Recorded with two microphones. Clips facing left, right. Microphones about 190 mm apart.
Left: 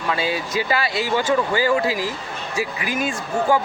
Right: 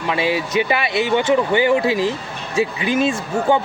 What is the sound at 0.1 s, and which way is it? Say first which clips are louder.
Speech: right 4 dB; 20° right (ahead or behind).